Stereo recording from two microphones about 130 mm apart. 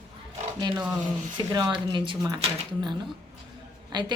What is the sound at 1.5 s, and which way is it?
Speech, 35° right (ahead or behind).